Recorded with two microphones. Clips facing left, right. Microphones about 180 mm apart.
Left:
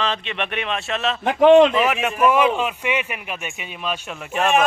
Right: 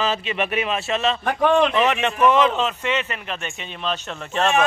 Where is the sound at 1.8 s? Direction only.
10° left (ahead or behind).